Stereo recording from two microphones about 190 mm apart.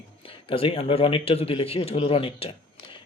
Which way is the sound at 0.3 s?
30° left (ahead or behind).